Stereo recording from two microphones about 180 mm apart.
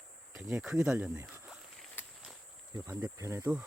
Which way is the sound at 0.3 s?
5° right (ahead or behind).